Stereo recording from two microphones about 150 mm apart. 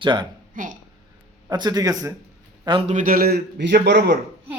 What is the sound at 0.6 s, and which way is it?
Speech, 60° right (ahead or behind).